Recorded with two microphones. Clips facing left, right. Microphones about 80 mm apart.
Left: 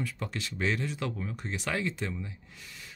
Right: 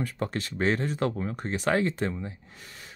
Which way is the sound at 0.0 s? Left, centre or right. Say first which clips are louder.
Right 5 dB; right.